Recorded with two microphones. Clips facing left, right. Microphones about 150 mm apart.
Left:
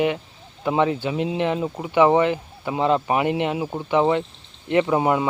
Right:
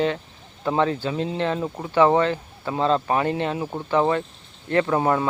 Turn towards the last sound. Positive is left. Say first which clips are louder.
# left 1 dB
turn(degrees=15)  # may be behind; listen again after turning